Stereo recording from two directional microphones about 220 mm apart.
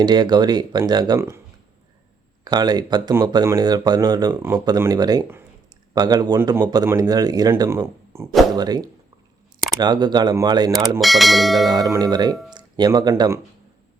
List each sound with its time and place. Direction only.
0.0 s speech: 20° right (ahead or behind)
2.4 s speech: 20° right (ahead or behind)
11.0 s speech: centre (ahead or behind)
11.9 s speech: 20° right (ahead or behind)